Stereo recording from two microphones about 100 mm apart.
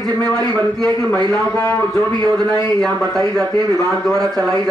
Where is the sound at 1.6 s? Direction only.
30° left (ahead or behind).